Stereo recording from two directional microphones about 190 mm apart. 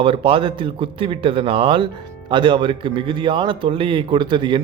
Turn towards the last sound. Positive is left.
turn(degrees=-25)  # may be behind; listen again after turning